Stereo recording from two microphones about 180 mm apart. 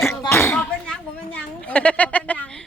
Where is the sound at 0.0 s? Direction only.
15° left (ahead or behind).